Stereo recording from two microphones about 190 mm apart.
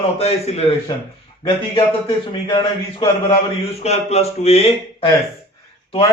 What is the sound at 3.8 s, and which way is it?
A man's voice, 35° left (ahead or behind).